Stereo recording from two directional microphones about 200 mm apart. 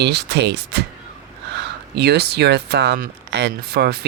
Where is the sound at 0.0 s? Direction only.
55° right (ahead or behind).